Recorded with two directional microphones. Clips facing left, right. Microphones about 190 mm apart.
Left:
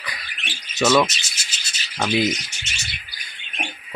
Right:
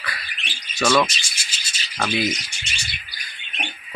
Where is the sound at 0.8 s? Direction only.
5° left (ahead or behind).